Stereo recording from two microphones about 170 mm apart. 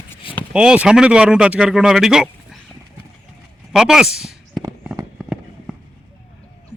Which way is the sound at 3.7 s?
5° right (ahead or behind).